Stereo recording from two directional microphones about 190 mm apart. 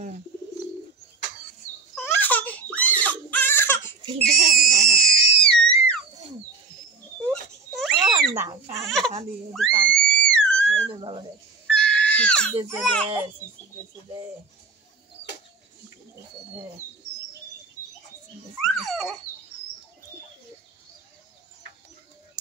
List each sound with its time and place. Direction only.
2.0 s crying: 10° left (ahead or behind)
4.6 s screaming: 5° left (ahead or behind)
7.2 s a sound: centre (ahead or behind)
8.8 s baby cry: centre (ahead or behind)
9.5 s a sound: 5° left (ahead or behind)
10.9 s dog: 25° right (ahead or behind)
11.6 s crying: 5° left (ahead or behind)
12.6 s speech: 5° left (ahead or behind)
18.6 s a sound: centre (ahead or behind)